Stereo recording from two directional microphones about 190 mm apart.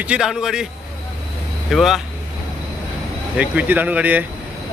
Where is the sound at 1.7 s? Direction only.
Centre (ahead or behind).